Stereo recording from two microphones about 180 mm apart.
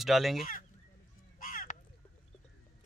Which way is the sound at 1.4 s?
50° left (ahead or behind).